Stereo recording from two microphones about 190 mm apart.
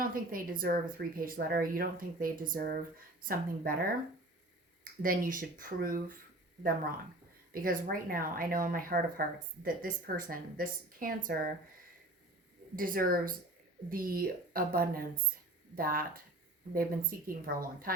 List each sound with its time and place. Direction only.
0.0 s speech: 50° right (ahead or behind)
7.5 s speech: 50° right (ahead or behind)
12.7 s speech: 50° right (ahead or behind)